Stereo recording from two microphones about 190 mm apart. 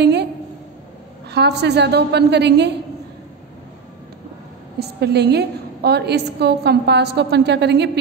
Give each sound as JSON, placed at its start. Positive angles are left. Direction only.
{"t": 0.0, "sound": "a sound", "side_deg": -60}
{"t": 1.3, "sound": "a woman's voice", "side_deg": -60}
{"t": 4.7, "sound": "a woman's voice", "side_deg": -60}